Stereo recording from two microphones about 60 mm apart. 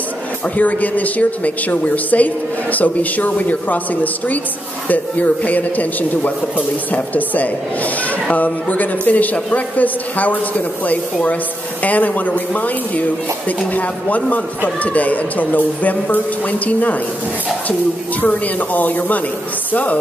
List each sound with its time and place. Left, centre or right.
0.6 s a man's voice: left
18.2 s a man's voice: left